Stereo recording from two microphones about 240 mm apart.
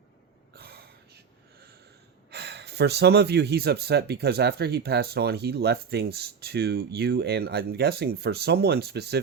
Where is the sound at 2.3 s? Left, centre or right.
Right.